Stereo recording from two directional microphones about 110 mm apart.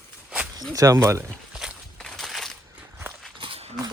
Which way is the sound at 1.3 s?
Centre (ahead or behind).